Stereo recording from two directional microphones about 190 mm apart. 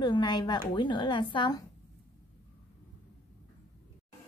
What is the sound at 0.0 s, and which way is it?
A woman's voice, 25° left (ahead or behind).